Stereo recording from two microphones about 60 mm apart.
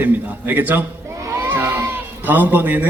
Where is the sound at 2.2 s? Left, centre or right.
Right.